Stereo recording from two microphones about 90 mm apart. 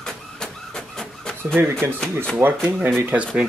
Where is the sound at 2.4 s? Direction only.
20° right (ahead or behind).